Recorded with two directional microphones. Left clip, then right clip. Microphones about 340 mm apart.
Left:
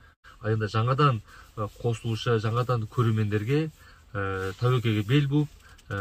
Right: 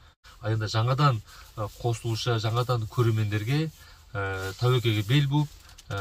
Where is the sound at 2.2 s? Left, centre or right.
Centre.